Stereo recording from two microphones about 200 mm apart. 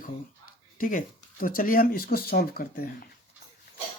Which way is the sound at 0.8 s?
40° left (ahead or behind).